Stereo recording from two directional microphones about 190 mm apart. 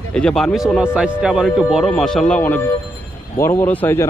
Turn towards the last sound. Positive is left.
turn(degrees=10)  # may be behind; listen again after turning